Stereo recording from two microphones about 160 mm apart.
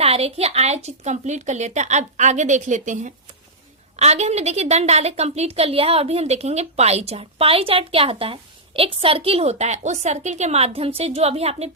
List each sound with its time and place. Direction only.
0.0 s a woman's voice: 40° right (ahead or behind)